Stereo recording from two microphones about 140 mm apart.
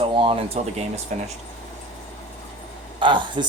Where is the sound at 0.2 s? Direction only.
40° right (ahead or behind).